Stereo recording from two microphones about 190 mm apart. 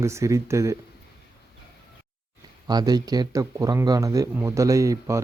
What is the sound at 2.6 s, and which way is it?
Speech, 20° right (ahead or behind).